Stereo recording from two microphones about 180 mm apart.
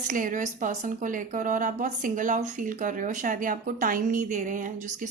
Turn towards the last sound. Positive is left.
turn(degrees=-45)  # may be behind; listen again after turning